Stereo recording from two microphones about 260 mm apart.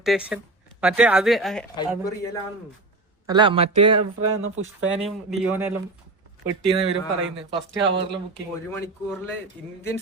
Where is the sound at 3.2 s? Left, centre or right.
Centre.